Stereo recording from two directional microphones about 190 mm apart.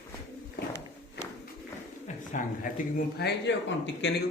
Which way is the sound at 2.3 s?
45° left (ahead or behind).